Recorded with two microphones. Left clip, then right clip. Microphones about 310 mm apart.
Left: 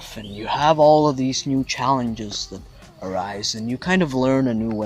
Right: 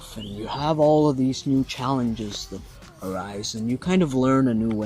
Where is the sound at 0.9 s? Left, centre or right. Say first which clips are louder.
Left 4 dB; left.